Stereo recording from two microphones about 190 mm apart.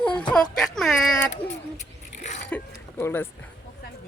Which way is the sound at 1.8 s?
40° left (ahead or behind).